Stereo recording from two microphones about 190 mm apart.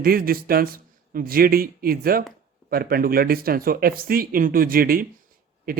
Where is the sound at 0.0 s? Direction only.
50° right (ahead or behind).